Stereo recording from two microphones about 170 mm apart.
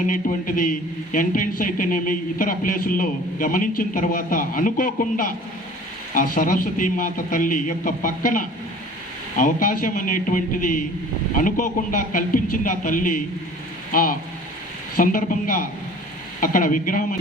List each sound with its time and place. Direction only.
0.1 s a man's voice: 50° left (ahead or behind)